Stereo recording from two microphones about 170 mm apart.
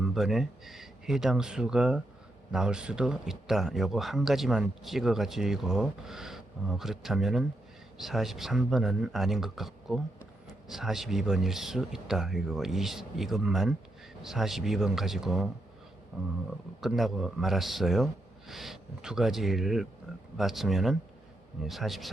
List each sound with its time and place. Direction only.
0.0 s speech: centre (ahead or behind)